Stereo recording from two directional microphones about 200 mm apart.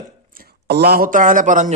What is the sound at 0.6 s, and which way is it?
A man's voice, 55° right (ahead or behind).